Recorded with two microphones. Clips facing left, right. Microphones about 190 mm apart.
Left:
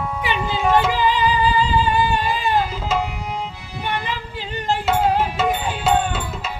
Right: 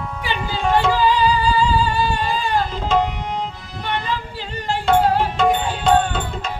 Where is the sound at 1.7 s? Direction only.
20° left (ahead or behind).